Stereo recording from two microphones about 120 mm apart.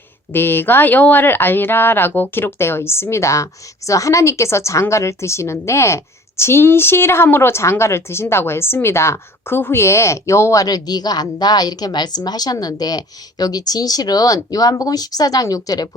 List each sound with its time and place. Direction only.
0.3 s speech: 15° left (ahead or behind)